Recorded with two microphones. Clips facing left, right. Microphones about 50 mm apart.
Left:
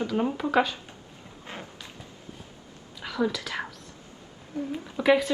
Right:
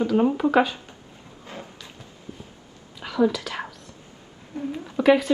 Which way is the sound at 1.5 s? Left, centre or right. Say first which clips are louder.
Right 1 dB; left.